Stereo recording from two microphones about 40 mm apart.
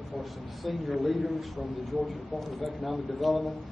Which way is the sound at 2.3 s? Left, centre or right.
Centre.